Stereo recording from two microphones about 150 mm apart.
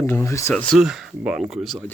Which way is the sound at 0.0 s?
20° left (ahead or behind).